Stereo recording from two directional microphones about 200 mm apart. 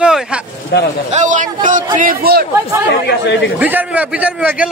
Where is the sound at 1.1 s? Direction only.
35° right (ahead or behind).